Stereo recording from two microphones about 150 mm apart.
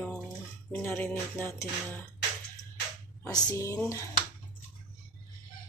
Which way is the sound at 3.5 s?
20° left (ahead or behind).